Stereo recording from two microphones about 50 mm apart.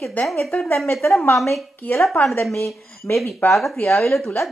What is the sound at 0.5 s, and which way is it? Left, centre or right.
Speech, left.